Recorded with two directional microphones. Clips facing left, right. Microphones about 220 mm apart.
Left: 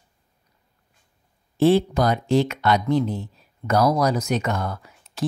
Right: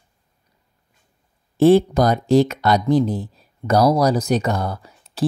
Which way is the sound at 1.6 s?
40° right (ahead or behind).